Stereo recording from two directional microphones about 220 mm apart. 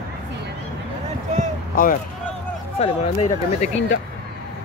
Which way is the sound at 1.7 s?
40° left (ahead or behind).